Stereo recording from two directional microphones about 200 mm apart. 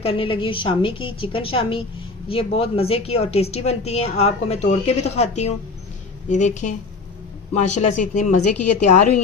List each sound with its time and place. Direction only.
0.0 s a woman's voice: 30° left (ahead or behind)